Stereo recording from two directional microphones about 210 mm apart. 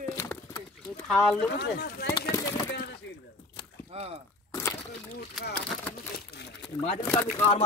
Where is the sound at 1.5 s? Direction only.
50° left (ahead or behind).